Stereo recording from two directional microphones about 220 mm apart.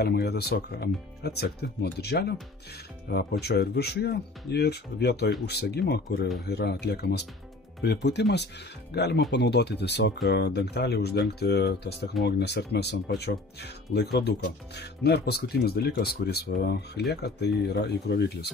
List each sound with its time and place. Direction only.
0.0 s speech: 45° left (ahead or behind)